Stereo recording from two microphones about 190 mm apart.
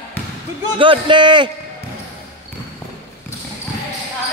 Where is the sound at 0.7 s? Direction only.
25° right (ahead or behind).